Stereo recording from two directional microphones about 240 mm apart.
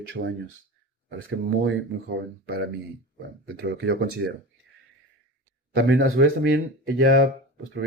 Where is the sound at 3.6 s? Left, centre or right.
Right.